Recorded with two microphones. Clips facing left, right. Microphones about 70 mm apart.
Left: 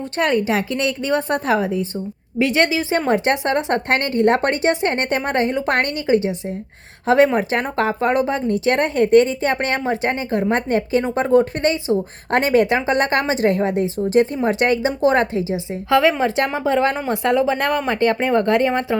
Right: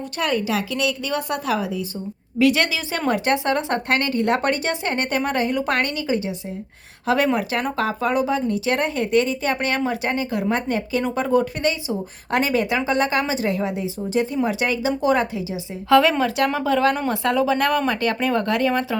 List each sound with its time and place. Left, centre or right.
0.2 s speech: left
7.3 s speech: left
15.9 s speech: centre
16.2 s speech: left